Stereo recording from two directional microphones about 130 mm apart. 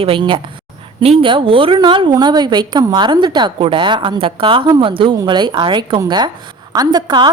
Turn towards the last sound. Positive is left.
turn(degrees=-35)  # may be behind; listen again after turning